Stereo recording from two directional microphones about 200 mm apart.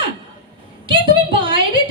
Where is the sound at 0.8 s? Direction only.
25° right (ahead or behind).